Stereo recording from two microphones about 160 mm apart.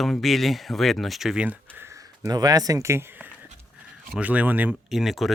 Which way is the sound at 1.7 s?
15° right (ahead or behind).